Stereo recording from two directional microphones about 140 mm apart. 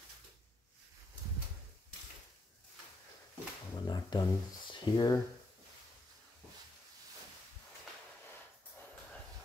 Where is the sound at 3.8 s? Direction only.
30° left (ahead or behind).